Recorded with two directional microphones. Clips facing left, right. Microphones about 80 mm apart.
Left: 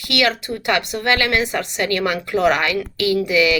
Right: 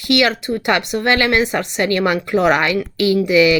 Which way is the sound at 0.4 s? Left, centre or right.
Right.